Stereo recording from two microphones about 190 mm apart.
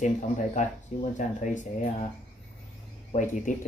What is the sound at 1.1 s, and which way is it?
Speech, 40° left (ahead or behind).